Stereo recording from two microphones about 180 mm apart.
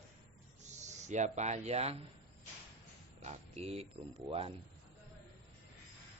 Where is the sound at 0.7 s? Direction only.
40° right (ahead or behind).